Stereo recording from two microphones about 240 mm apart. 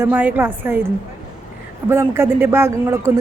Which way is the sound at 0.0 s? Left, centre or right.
Centre.